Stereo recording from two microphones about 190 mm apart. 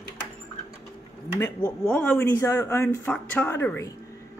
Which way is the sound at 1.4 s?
10° left (ahead or behind).